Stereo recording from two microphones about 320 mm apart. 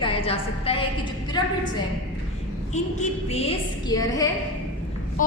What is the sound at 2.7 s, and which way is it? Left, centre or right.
A woman's voice, left.